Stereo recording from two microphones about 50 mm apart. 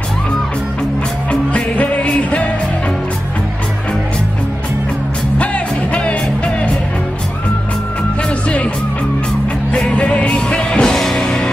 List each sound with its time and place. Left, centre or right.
1.3 s music: left
5.4 s music: left
9.8 s music: left
10.9 s music: centre